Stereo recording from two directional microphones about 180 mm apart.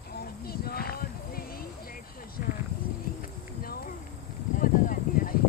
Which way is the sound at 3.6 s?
55° left (ahead or behind).